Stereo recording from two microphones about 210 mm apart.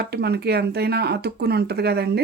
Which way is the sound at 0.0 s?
50° right (ahead or behind).